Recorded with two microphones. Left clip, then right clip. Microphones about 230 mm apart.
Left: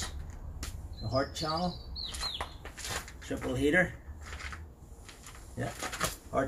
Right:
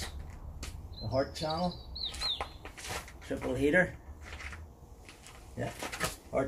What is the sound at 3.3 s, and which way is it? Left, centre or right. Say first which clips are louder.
Speech: even; centre.